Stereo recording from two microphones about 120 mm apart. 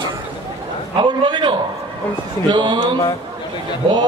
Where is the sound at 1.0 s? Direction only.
40° right (ahead or behind).